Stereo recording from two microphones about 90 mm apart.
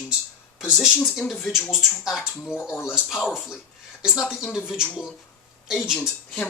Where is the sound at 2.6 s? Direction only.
25° left (ahead or behind).